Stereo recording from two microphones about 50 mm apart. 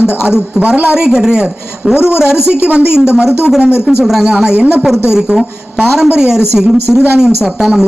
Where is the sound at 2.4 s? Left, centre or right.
Left.